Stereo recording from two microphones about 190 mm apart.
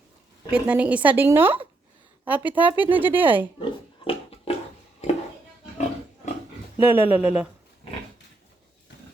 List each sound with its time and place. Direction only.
0.5 s a woman's voice: 5° right (ahead or behind)
3.6 s pig: 30° left (ahead or behind)
6.7 s a woman's voice: 10° right (ahead or behind)